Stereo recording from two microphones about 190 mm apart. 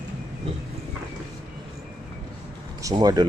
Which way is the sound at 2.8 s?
20° right (ahead or behind).